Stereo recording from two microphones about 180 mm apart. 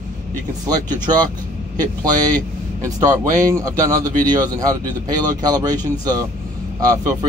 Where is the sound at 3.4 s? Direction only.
20° right (ahead or behind).